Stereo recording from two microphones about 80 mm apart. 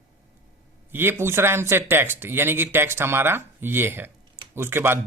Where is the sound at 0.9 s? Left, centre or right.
Right.